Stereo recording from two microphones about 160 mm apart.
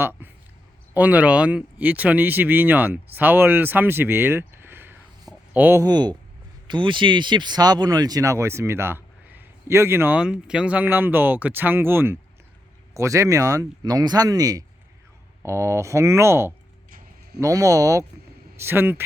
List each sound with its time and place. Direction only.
0.0 s a man's voice: 15° right (ahead or behind)
5.8 s speech: 25° right (ahead or behind)